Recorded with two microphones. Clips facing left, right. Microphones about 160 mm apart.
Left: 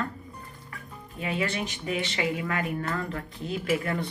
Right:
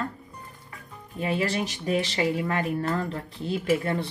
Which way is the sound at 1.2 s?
35° right (ahead or behind).